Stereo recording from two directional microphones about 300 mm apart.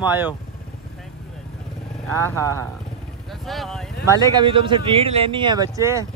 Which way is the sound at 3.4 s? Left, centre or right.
Centre.